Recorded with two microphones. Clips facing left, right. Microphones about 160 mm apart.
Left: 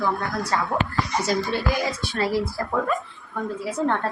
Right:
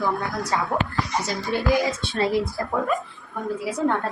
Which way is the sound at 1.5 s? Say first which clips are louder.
Right 1 dB; 15° right (ahead or behind).